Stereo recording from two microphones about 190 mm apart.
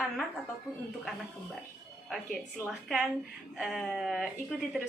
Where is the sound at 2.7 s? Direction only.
Centre (ahead or behind).